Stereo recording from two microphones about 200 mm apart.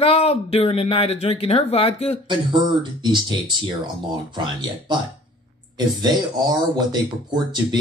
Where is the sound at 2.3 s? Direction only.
20° right (ahead or behind).